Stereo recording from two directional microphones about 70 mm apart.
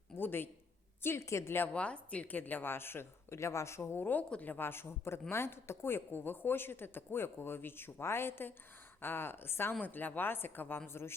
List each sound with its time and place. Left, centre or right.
0.2 s speech: left
1.7 s speech: centre; by 4.0 s left
4.0 s speech: left